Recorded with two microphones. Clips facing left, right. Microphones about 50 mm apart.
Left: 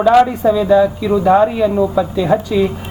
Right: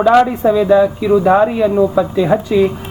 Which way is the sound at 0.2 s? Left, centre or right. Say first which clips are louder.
Even; centre.